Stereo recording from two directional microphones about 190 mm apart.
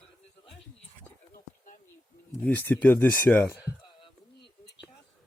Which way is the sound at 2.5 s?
10° left (ahead or behind).